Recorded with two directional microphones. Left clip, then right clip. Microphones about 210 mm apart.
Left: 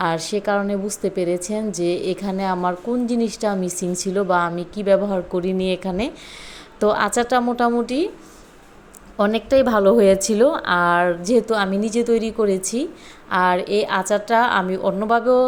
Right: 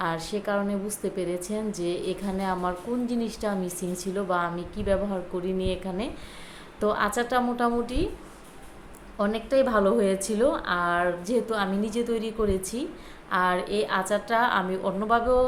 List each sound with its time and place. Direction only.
0.0 s a woman's voice: 35° left (ahead or behind)
9.1 s a woman's voice: 40° left (ahead or behind)